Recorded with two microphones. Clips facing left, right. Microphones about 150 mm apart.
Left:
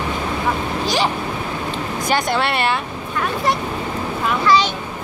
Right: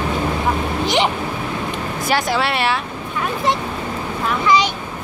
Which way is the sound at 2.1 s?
Centre (ahead or behind).